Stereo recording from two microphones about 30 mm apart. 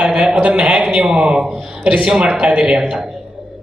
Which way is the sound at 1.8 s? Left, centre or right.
Right.